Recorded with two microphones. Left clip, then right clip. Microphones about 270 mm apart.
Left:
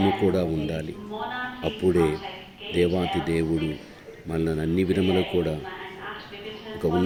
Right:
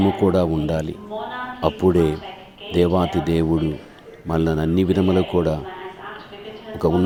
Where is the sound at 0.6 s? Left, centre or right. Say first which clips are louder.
Right 7 dB; right.